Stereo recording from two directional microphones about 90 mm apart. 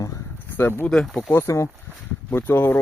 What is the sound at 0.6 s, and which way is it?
Speech, 20° left (ahead or behind).